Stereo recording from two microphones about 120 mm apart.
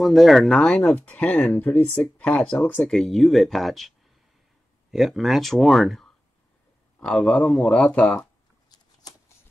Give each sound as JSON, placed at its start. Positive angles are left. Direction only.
{"t": 0.0, "sound": "speech", "side_deg": 0}
{"t": 4.9, "sound": "speech", "side_deg": 0}
{"t": 8.2, "sound": "a sound", "side_deg": 35}